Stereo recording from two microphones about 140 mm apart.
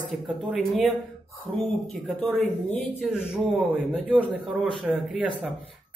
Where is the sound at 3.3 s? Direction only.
5° right (ahead or behind).